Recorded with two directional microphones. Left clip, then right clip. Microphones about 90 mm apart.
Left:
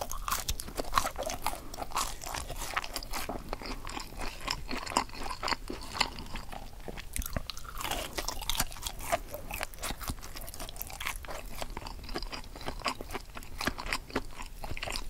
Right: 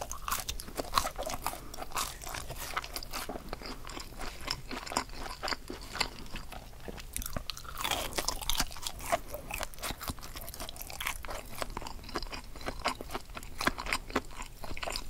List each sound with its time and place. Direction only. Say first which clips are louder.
0.0 s crunch: left 2 dB; 20° left (ahead or behind)
1.8 s crunch: left 2 dB; 40° left (ahead or behind)
7.8 s crunch: right 2 dB; 15° right (ahead or behind)
8.4 s crunch: even; centre (ahead or behind)
10.6 s chewing: right 1 dB; centre (ahead or behind)
13.1 s a sound: even; centre (ahead or behind)
14.6 s dog: even; 20° left (ahead or behind)